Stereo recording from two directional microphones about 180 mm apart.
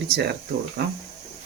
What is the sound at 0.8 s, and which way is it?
Speech, 65° right (ahead or behind).